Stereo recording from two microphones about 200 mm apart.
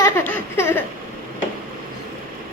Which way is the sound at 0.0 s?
10° left (ahead or behind).